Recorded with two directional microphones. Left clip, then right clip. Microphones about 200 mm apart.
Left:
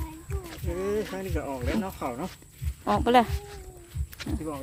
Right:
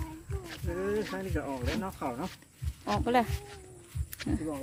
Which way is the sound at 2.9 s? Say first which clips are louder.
Left 6 dB; 35° left (ahead or behind).